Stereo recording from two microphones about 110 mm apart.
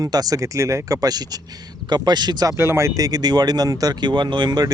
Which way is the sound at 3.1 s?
40° right (ahead or behind).